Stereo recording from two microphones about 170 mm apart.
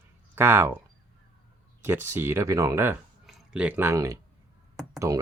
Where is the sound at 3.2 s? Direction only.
5° right (ahead or behind).